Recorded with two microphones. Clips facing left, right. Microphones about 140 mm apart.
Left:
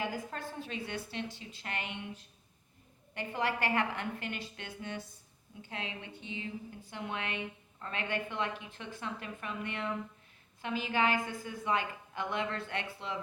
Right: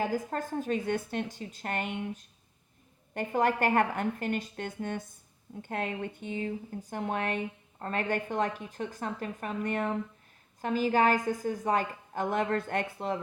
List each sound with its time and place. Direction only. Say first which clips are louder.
0.0 s speech: right 6 dB; 45° right (ahead or behind)